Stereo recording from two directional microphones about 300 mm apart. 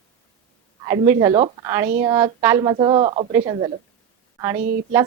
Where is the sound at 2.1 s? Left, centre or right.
Centre.